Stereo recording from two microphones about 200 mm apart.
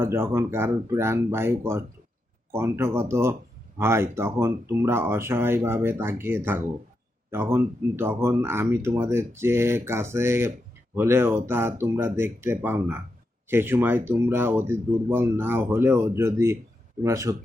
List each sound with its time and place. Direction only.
0.0 s speech: 15° right (ahead or behind)